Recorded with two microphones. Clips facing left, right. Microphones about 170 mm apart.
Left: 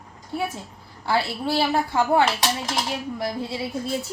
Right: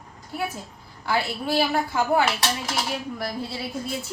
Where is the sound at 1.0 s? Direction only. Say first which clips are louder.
Left 2 dB; 30° left (ahead or behind).